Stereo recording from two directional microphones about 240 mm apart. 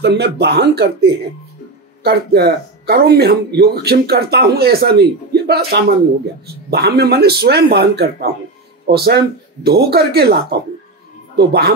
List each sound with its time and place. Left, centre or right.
0.0 s speech: right
11.3 s speech: right